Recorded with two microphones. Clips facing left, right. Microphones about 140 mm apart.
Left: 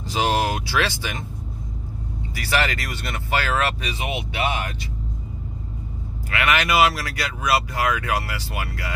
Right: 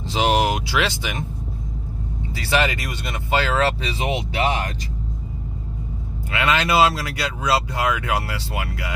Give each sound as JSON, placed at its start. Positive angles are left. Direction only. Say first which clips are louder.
{"t": 0.1, "sound": "speech", "louder": "right 2 dB", "side_deg": -20}
{"t": 2.3, "sound": "speech", "louder": "right 2 dB", "side_deg": -25}
{"t": 6.3, "sound": "speech", "louder": "right 1 dB", "side_deg": -25}